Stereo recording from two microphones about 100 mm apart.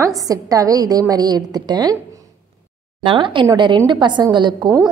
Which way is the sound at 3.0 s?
55° right (ahead or behind).